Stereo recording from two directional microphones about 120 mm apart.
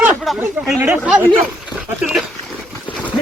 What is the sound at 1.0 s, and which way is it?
Speech, 10° right (ahead or behind).